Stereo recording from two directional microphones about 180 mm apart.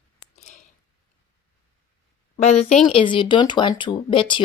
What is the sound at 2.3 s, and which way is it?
Speech, 40° left (ahead or behind).